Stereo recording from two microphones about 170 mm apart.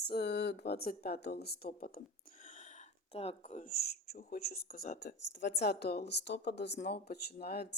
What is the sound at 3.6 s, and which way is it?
Speech, 60° left (ahead or behind).